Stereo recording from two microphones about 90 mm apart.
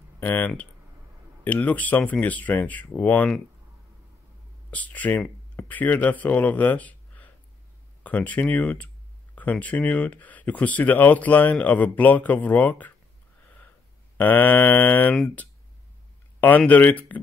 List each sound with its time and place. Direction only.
0.2 s speech: 20° left (ahead or behind)
4.6 s speech: 15° left (ahead or behind)
14.1 s mantra: 20° left (ahead or behind)
16.3 s mantra: 20° left (ahead or behind)